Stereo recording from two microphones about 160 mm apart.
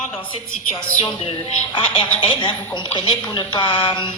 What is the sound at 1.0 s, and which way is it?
A woman's voice, 30° left (ahead or behind).